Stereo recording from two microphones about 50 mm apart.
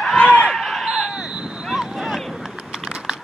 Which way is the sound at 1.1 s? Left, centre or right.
Centre.